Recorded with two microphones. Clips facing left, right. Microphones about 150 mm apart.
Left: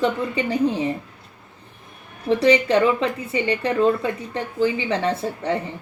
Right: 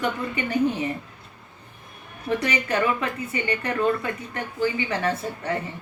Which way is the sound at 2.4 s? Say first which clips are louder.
Left 10 dB; 30° left (ahead or behind).